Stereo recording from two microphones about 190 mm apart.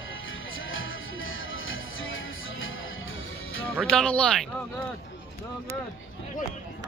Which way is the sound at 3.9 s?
5° left (ahead or behind).